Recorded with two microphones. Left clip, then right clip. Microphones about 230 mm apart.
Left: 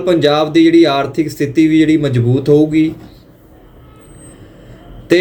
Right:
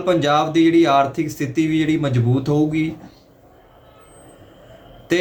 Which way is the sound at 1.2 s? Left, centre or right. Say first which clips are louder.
Left 8 dB; right.